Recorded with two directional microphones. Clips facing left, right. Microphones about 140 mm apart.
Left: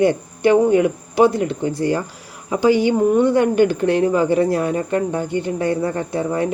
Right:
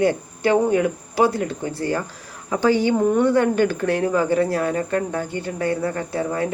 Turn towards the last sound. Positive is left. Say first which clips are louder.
# left 3 dB
turn(degrees=25)  # may be behind; listen again after turning